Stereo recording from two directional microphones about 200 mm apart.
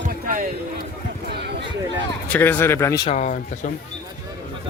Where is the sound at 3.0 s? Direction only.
35° left (ahead or behind).